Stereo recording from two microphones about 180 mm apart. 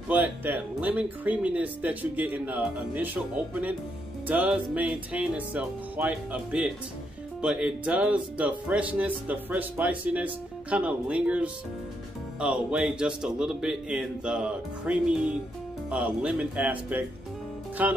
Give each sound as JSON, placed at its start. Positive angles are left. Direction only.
{"t": 0.1, "sound": "speech", "side_deg": -10}
{"t": 4.3, "sound": "speech", "side_deg": -10}
{"t": 17.8, "sound": "speech", "side_deg": -10}